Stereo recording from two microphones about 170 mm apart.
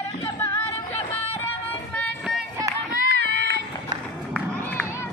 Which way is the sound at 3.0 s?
90° right.